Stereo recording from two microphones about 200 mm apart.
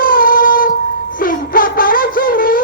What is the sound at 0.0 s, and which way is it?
Shofar, 45° left (ahead or behind).